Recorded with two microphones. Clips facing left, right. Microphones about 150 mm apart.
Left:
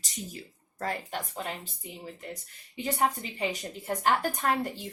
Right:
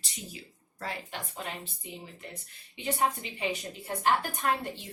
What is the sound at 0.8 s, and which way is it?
Speech, 45° left (ahead or behind).